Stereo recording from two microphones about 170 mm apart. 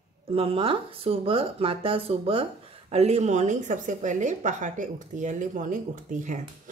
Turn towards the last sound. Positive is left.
turn(degrees=-50)  # may be behind; listen again after turning